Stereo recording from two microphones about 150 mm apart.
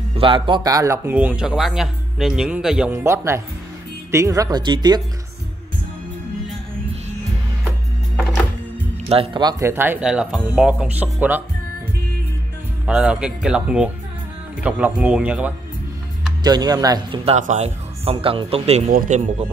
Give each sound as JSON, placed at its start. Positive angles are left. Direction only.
{"t": 0.1, "sound": "speech", "side_deg": -35}
{"t": 2.9, "sound": "speech", "side_deg": -15}
{"t": 9.1, "sound": "speech", "side_deg": -40}
{"t": 9.4, "sound": "speech", "side_deg": -30}
{"t": 9.7, "sound": "speech", "side_deg": -15}
{"t": 12.8, "sound": "speech", "side_deg": -5}
{"t": 16.4, "sound": "speech", "side_deg": -25}
{"t": 17.2, "sound": "speech", "side_deg": -45}
{"t": 18.1, "sound": "speech", "side_deg": -35}
{"t": 18.9, "sound": "speech", "side_deg": -55}